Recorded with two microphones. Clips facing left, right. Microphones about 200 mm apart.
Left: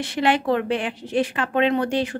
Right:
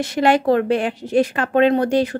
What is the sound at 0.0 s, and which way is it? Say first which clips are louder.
Speech: right 5 dB; 40° right (ahead or behind).